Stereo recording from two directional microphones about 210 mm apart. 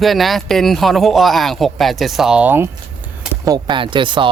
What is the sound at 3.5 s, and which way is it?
Speech, 20° right (ahead or behind).